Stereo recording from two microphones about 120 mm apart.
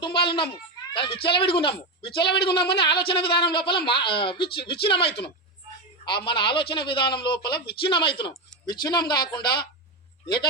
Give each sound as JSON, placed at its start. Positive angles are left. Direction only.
{"t": 0.0, "sound": "a child's voice", "side_deg": 45}